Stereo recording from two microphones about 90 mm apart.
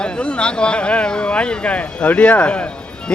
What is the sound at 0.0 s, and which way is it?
Speech, 10° left (ahead or behind).